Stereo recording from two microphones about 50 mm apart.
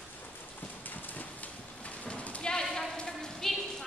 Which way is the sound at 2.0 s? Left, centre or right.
Left.